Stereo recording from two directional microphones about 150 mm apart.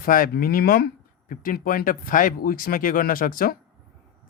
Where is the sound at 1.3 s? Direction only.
70° left (ahead or behind).